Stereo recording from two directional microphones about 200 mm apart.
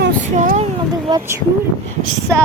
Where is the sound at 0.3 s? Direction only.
35° right (ahead or behind).